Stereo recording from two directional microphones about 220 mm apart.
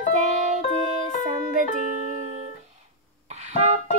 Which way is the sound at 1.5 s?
35° right (ahead or behind).